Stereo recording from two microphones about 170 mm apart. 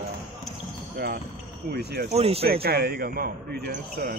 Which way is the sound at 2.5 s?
70° right (ahead or behind).